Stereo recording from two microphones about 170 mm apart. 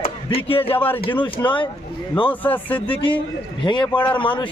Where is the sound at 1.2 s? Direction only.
30° left (ahead or behind).